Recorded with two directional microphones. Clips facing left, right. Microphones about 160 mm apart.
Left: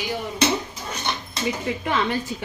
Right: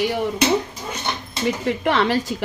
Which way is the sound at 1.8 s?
75° right (ahead or behind).